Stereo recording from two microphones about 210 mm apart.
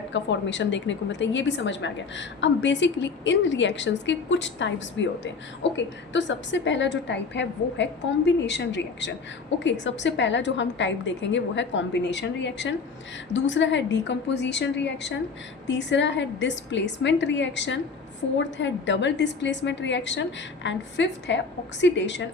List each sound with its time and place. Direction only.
0.1 s a woman's voice: 60° left (ahead or behind)